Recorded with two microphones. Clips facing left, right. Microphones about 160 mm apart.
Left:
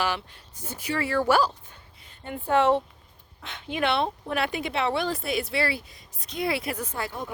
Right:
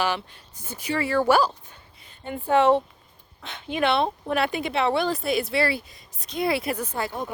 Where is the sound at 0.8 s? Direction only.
20° right (ahead or behind).